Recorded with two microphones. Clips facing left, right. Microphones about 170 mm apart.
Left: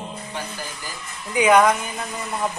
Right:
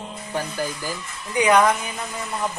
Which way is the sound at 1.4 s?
5° left (ahead or behind).